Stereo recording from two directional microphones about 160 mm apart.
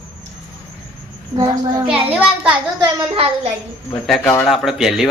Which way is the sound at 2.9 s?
35° right (ahead or behind).